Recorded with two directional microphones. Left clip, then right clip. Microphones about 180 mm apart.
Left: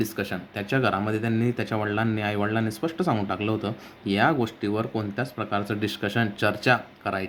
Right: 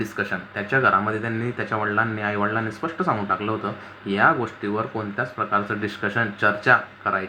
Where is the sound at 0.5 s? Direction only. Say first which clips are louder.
Right 6 dB; 90° left.